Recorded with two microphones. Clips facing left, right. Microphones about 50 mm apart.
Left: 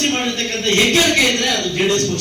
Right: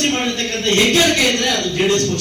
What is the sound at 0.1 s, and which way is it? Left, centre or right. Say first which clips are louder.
A woman's voice: even; centre.